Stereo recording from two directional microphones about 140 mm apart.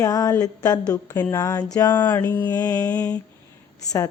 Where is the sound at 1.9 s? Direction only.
15° left (ahead or behind).